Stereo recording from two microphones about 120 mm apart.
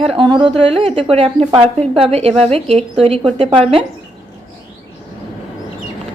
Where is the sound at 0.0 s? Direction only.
50° right (ahead or behind).